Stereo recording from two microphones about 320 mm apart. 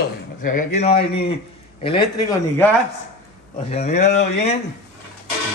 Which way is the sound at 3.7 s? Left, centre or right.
Left.